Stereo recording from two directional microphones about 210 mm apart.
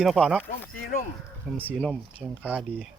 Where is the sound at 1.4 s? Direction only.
Centre (ahead or behind).